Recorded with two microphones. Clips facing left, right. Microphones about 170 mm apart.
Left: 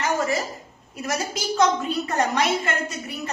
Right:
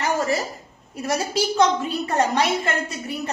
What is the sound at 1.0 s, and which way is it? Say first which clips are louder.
A woman's voice: right 4 dB; 30° right (ahead or behind).